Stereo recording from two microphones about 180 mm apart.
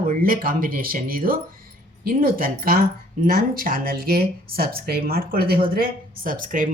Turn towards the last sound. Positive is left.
turn(degrees=-45)  # may be behind; listen again after turning